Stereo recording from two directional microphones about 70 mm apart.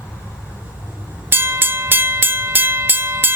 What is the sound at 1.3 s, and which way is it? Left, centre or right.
Train, right.